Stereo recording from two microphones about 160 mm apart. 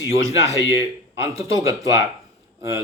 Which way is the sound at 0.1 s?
20° right (ahead or behind).